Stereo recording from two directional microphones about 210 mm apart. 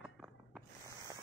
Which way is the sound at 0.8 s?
15° right (ahead or behind).